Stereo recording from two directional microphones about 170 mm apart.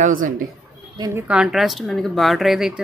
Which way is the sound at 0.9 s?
20° right (ahead or behind).